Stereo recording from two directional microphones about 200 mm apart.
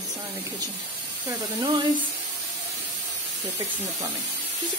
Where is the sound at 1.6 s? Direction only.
25° right (ahead or behind).